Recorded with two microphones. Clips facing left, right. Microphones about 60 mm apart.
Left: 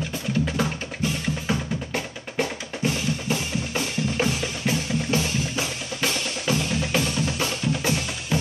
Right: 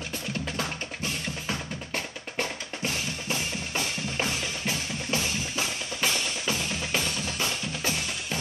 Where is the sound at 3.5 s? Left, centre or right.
Centre.